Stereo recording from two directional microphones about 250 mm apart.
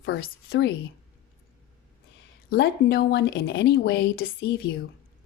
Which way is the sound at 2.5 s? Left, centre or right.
Left.